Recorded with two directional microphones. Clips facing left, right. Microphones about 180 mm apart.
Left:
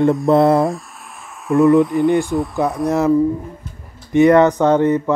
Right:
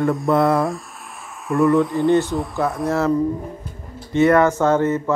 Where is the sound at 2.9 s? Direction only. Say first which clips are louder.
Left 5 dB; 20° left (ahead or behind).